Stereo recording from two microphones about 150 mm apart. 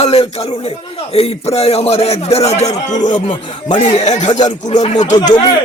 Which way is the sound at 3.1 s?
30° left (ahead or behind).